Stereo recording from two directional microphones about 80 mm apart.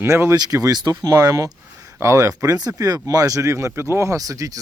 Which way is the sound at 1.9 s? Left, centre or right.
Right.